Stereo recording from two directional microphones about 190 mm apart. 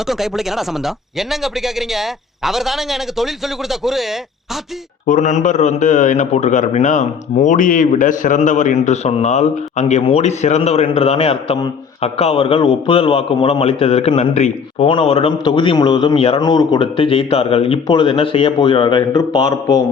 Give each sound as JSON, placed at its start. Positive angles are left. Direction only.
{"t": 0.1, "sound": "a man's voice", "side_deg": 0}
{"t": 5.0, "sound": "a man's voice", "side_deg": 40}